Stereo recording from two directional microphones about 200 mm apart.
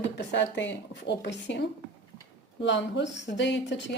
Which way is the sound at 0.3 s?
60° left (ahead or behind).